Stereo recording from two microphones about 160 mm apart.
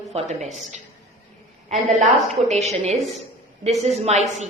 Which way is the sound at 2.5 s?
40° right (ahead or behind).